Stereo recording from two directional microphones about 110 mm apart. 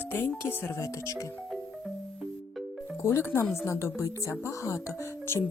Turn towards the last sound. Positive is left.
turn(degrees=20)  # may be behind; listen again after turning